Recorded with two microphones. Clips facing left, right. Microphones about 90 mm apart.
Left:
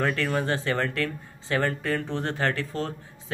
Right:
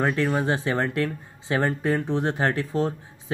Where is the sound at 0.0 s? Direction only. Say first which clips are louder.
Right 3 dB; 15° right (ahead or behind).